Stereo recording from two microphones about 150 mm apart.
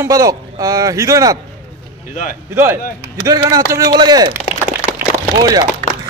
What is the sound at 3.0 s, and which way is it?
A man's voice, 20° right (ahead or behind).